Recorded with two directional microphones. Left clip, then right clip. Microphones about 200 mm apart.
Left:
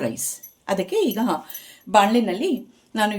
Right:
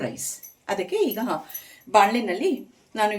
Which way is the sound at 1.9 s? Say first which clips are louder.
Left 1 dB; 50° left (ahead or behind).